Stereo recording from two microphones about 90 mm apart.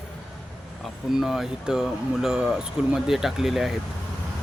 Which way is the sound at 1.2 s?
5° right (ahead or behind).